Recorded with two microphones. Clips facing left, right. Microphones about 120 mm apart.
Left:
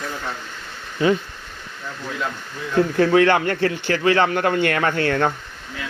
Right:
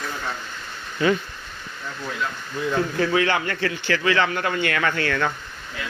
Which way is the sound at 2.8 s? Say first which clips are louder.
Left 7 dB; 45° left (ahead or behind).